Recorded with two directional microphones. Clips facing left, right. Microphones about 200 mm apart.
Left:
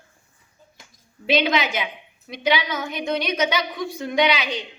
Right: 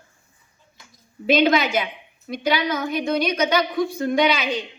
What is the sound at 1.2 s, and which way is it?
Speech, 45° right (ahead or behind).